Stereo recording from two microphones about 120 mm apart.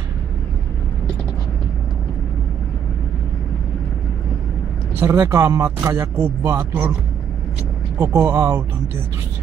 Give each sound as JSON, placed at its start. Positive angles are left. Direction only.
{"t": 4.9, "sound": "speech", "side_deg": -20}
{"t": 8.0, "sound": "speech", "side_deg": -20}